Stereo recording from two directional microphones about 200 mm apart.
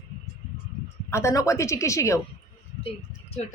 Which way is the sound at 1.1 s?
15° left (ahead or behind).